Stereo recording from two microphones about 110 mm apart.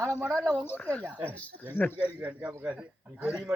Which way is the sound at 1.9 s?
15° right (ahead or behind).